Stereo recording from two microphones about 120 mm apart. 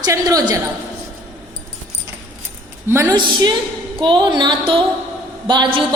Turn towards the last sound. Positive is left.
turn(degrees=-40)  # may be behind; listen again after turning